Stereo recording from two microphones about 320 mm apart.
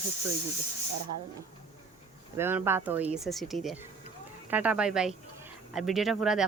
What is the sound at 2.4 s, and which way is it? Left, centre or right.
A woman's voice, centre.